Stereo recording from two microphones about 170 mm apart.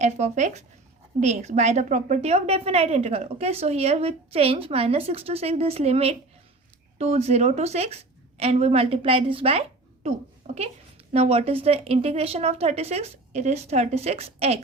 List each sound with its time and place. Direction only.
0.0 s a woman's voice: 45° right (ahead or behind)